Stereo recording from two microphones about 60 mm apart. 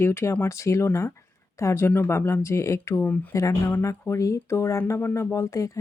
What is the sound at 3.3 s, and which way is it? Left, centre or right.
Speech, left.